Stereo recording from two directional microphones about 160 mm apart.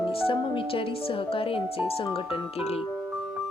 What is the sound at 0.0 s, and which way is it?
Music, 35° left (ahead or behind).